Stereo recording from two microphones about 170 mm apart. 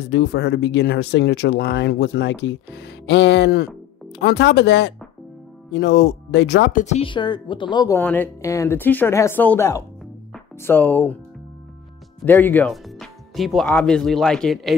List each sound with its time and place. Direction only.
0.0 s speech: 80° left
6.8 s speech: 40° left (ahead or behind)
8.0 s speech: 10° left (ahead or behind)
12.3 s speech: 10° left (ahead or behind)